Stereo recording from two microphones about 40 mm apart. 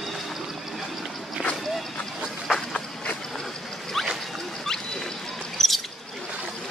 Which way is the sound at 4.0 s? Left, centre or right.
Centre.